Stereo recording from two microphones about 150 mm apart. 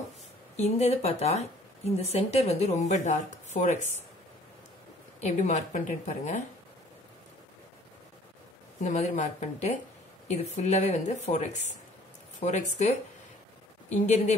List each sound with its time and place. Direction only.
0.6 s speech: 45° left (ahead or behind)
5.2 s speech: 50° left (ahead or behind)
8.8 s speech: 50° left (ahead or behind)